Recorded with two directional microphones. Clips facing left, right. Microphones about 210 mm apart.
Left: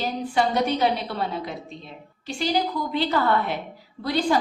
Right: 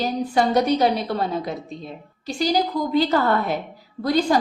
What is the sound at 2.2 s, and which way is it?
A woman's voice, 40° right (ahead or behind).